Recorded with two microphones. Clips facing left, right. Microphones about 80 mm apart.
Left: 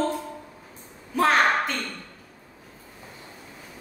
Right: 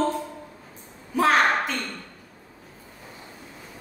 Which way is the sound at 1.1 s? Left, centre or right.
Centre.